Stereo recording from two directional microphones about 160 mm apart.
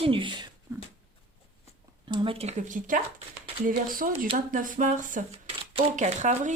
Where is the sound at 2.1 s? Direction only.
30° right (ahead or behind).